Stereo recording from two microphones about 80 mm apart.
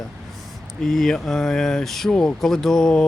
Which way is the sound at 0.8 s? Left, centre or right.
Centre.